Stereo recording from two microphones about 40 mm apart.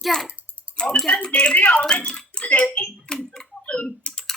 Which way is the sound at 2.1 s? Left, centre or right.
Left.